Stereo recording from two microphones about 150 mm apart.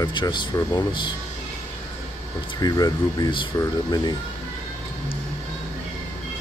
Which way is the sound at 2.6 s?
25° left (ahead or behind).